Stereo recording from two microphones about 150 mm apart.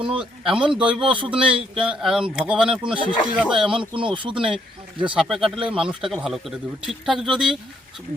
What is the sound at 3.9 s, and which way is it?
Speech, 35° right (ahead or behind).